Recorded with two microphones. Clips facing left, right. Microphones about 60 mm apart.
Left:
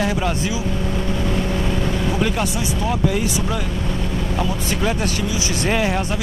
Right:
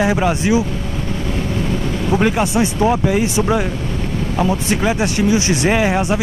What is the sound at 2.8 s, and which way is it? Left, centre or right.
Speech, right.